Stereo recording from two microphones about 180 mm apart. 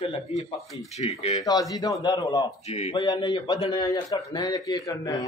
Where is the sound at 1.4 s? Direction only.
20° left (ahead or behind).